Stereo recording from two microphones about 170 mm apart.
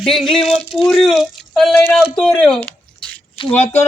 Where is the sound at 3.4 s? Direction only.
30° left (ahead or behind).